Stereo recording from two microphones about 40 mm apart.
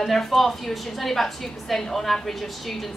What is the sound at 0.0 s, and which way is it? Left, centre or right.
A woman's voice, centre.